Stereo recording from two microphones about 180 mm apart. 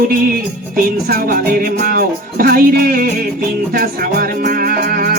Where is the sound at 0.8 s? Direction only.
55° right (ahead or behind).